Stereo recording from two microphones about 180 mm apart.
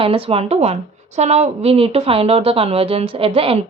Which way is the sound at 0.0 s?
30° right (ahead or behind).